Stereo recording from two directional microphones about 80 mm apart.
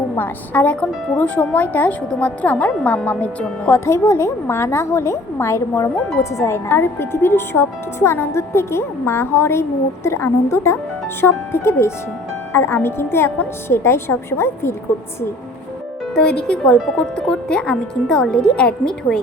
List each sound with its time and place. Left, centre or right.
0.2 s a woman's voice: centre
3.7 s speech: left
16.1 s speech: centre